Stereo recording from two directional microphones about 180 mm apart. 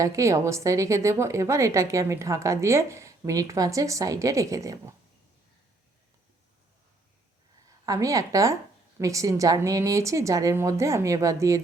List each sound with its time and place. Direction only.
0.0 s speech: 15° right (ahead or behind)
7.9 s speech: 20° right (ahead or behind)